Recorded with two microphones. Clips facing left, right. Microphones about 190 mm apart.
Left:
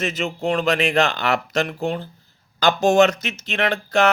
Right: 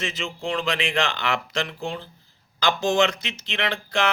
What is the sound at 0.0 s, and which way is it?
Speech, 45° left (ahead or behind).